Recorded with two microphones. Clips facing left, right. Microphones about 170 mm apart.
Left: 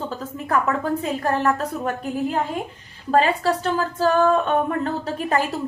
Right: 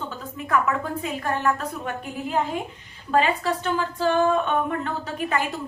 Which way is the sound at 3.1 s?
35° left (ahead or behind).